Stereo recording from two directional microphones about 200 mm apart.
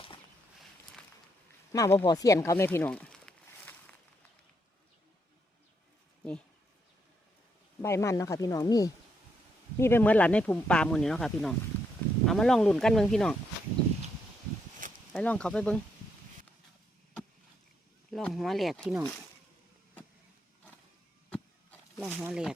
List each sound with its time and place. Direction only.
1.7 s speech: 15° left (ahead or behind)
7.8 s speech: 15° left (ahead or behind)
15.1 s speech: 5° left (ahead or behind)
18.1 s speech: centre (ahead or behind)
21.2 s a sound: 5° left (ahead or behind)
22.2 s speech: 5° right (ahead or behind)